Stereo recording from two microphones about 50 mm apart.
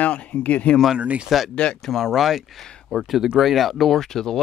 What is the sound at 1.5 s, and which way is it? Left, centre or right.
Speech, centre.